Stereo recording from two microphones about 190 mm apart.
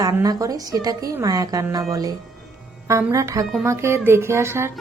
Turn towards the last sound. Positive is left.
turn(degrees=-15)  # may be behind; listen again after turning